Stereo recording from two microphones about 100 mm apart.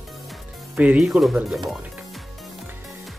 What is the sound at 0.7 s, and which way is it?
Speech, 15° right (ahead or behind).